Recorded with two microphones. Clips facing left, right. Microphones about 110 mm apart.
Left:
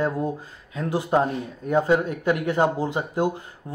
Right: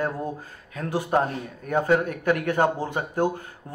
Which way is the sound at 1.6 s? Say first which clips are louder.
Left 1 dB; 25° left (ahead or behind).